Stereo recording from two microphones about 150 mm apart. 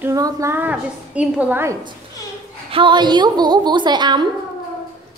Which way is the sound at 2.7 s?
35° right (ahead or behind).